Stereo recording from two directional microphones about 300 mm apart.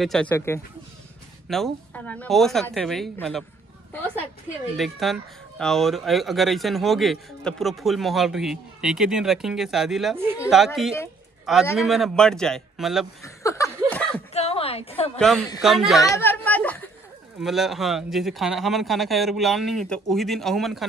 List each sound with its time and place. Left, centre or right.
0.0 s speech: centre
4.7 s speech: centre
13.2 s laughter: centre
14.3 s a sound: centre
15.1 s speech: centre
16.0 s a sound: centre
17.4 s speech: centre